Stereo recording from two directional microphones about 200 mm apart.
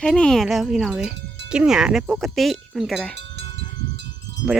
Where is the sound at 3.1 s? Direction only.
60° right (ahead or behind).